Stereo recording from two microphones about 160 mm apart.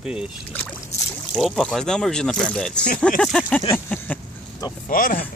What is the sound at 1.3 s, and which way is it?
Speech, 5° left (ahead or behind).